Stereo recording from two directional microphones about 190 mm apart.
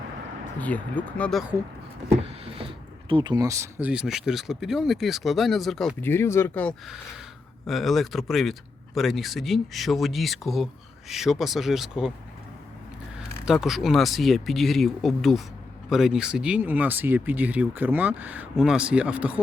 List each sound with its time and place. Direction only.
0.6 s speech: 10° left (ahead or behind)
2.2 s a sound: 30° right (ahead or behind)
3.1 s speech: 25° right (ahead or behind); by 12.1 s centre (ahead or behind)
13.1 s speech: 5° right (ahead or behind)